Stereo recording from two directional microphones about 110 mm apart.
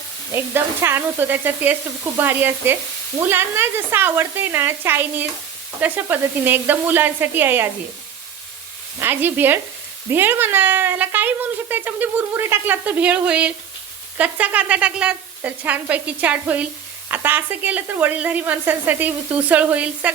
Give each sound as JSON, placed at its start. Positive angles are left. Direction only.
{"t": 0.3, "sound": "a woman's voice", "side_deg": -20}
{"t": 9.0, "sound": "a woman's voice", "side_deg": -20}